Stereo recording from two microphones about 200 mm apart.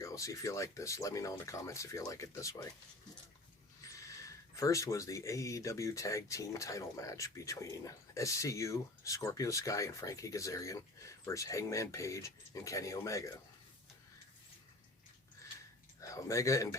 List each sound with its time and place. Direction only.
0.0 s speech: 15° left (ahead or behind)
3.9 s speech: 15° left (ahead or behind)
16.0 s speech: 15° left (ahead or behind)